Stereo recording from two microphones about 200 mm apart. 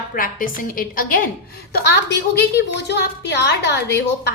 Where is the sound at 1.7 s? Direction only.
55° left (ahead or behind).